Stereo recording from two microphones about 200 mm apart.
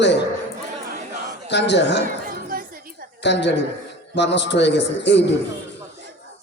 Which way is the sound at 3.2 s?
60° left (ahead or behind).